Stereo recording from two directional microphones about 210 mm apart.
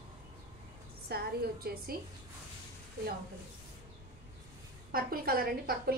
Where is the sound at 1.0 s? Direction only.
45° right (ahead or behind).